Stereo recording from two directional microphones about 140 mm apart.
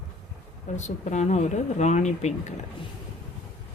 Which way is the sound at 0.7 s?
55° left (ahead or behind).